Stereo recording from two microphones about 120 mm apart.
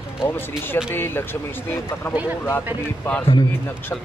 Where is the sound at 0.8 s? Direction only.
20° left (ahead or behind).